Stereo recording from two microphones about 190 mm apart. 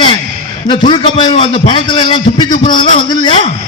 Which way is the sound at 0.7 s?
25° left (ahead or behind).